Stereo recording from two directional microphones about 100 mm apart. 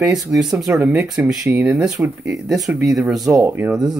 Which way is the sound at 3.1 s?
35° right (ahead or behind).